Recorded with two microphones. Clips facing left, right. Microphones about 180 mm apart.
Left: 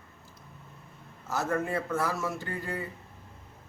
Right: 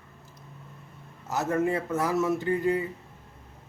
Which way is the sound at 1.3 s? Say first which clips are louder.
Right 4 dB; 20° right (ahead or behind).